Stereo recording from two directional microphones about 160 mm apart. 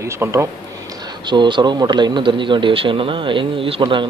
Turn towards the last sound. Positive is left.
turn(degrees=-30)  # may be behind; listen again after turning